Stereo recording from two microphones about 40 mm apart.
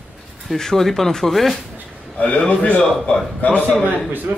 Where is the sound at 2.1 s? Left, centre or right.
Left.